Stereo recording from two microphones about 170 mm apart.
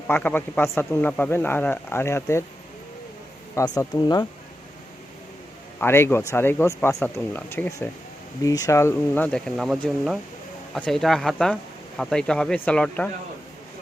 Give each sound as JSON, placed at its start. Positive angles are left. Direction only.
{"t": 0.1, "sound": "a man's voice", "side_deg": 10}
{"t": 3.5, "sound": "speech", "side_deg": 20}
{"t": 5.8, "sound": "a man's voice", "side_deg": 15}